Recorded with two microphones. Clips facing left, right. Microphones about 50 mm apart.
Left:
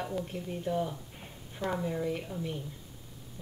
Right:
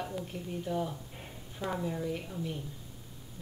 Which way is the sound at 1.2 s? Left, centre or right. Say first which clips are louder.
Left 3 dB; centre.